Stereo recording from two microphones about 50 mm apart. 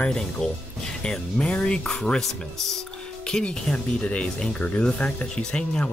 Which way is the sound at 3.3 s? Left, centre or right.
Centre.